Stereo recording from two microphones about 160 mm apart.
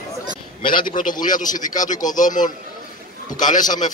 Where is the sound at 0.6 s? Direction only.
30° left (ahead or behind).